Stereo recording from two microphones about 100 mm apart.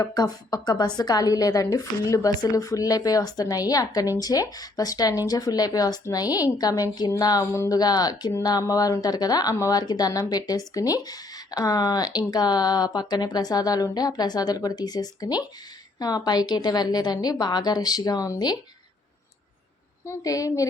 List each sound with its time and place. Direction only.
0.0 s a woman's voice: 40° left (ahead or behind)
20.1 s a woman's voice: 35° left (ahead or behind)